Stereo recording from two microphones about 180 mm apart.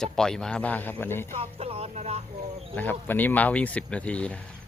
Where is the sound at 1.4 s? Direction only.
35° right (ahead or behind).